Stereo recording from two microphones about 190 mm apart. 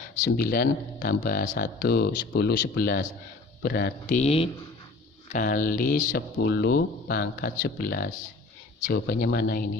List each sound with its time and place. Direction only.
0.3 s speech: 50° left (ahead or behind)
4.1 s speech: 35° left (ahead or behind)
5.3 s speech: 45° left (ahead or behind)